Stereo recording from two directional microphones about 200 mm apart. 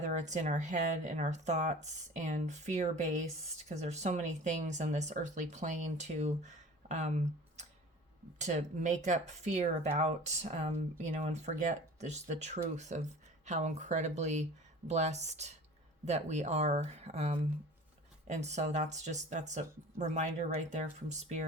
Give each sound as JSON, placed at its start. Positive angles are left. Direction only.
{"t": 0.0, "sound": "speech", "side_deg": -35}
{"t": 8.4, "sound": "speech", "side_deg": -35}